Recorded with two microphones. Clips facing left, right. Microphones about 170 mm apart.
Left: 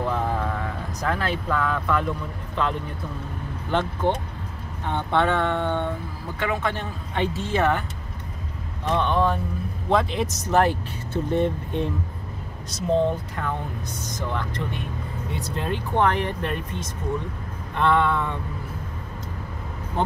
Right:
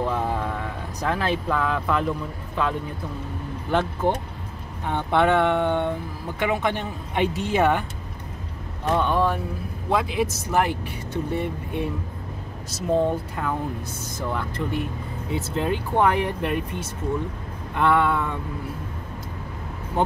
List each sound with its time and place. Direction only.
0.1 s a sound: 10° right (ahead or behind)
1.0 s speech: 15° right (ahead or behind)
3.7 s speech: 10° right (ahead or behind)
8.8 s speech: 5° right (ahead or behind)